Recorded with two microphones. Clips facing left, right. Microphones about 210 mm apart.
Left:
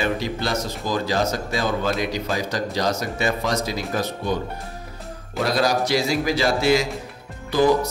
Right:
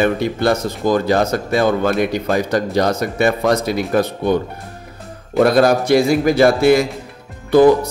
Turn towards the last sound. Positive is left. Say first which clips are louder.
# right 9 dB
turn(degrees=-55)  # may be behind; listen again after turning